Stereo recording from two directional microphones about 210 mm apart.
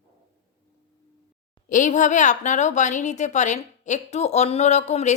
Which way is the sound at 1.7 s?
35° left (ahead or behind).